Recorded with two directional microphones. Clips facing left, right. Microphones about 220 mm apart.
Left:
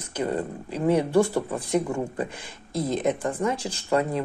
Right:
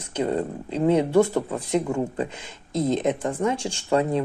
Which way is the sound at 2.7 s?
25° right (ahead or behind).